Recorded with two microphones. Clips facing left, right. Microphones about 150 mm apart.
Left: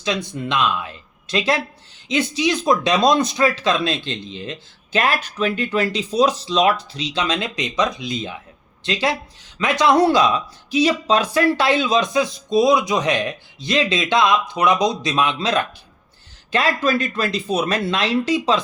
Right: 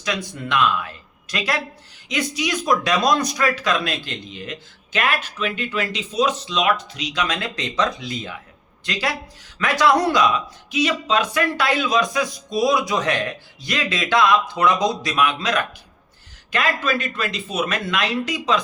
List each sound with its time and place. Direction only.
0.0 s speech: 25° left (ahead or behind)